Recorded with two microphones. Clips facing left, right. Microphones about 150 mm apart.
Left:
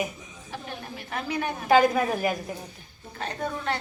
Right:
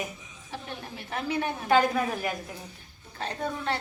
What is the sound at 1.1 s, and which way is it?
Speech, 25° right (ahead or behind).